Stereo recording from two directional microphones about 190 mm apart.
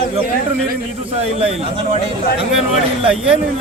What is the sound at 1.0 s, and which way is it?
Speech, 30° right (ahead or behind).